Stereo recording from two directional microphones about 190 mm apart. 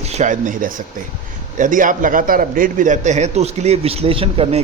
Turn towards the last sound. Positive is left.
turn(degrees=-30)  # may be behind; listen again after turning